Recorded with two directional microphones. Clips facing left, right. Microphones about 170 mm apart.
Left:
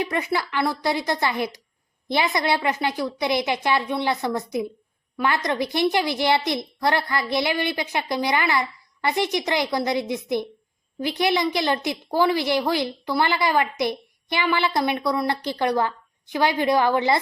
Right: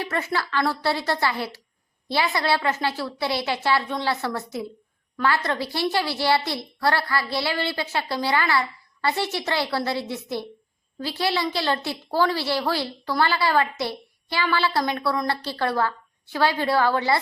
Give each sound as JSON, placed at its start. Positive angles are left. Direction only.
{"t": 0.0, "sound": "a woman's voice", "side_deg": 15}